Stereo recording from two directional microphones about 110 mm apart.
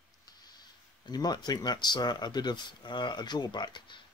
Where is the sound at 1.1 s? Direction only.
40° left (ahead or behind).